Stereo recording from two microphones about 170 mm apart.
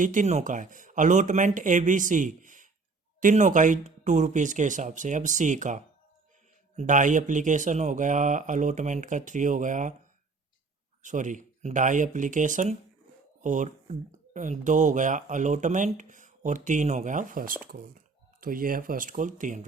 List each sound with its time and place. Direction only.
0.0 s speech: 50° right (ahead or behind)
11.0 s speech: 45° right (ahead or behind)